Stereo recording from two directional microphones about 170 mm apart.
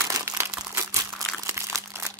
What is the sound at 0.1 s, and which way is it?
Crumpling, 15° right (ahead or behind).